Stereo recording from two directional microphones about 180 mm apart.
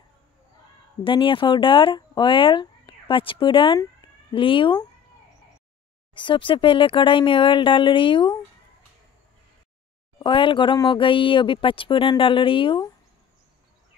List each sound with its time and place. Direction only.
1.0 s speech: 30° left (ahead or behind)
6.1 s speech: 25° left (ahead or behind)
10.1 s speech: 25° left (ahead or behind)